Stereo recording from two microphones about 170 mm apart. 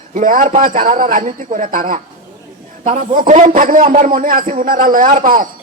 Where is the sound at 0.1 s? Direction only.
55° right (ahead or behind).